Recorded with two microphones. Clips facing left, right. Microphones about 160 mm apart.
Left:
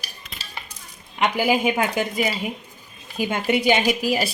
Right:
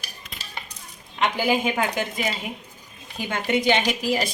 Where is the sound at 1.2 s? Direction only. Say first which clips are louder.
Left 2 dB; 10° left (ahead or behind).